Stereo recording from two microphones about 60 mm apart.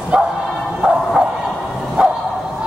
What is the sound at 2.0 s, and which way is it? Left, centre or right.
Bow-wow, centre.